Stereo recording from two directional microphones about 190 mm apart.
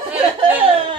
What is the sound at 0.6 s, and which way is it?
Laughter, 30° right (ahead or behind).